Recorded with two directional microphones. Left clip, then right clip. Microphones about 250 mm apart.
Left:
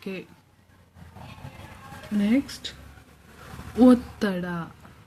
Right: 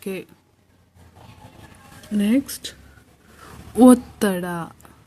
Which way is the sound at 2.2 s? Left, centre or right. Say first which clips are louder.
Right 3 dB; right.